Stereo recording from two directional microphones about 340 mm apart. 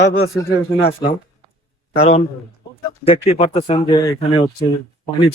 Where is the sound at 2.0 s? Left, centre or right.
Centre.